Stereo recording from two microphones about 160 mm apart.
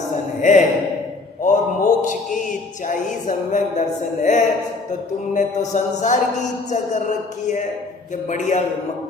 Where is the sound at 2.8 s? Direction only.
55° left (ahead or behind).